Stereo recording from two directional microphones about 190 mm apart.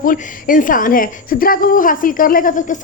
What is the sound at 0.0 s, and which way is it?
A woman's voice, 45° left (ahead or behind).